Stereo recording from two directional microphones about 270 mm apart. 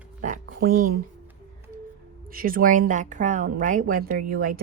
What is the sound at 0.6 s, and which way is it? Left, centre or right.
Speech, right.